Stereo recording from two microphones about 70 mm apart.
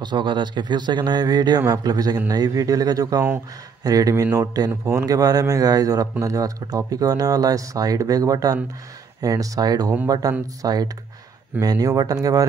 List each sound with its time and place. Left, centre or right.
0.0 s speech: right